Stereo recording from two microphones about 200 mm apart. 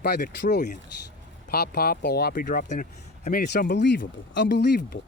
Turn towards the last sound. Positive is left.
turn(degrees=55)  # may be behind; listen again after turning